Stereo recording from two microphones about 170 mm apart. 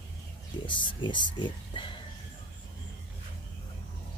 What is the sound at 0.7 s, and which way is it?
Speech, 30° left (ahead or behind).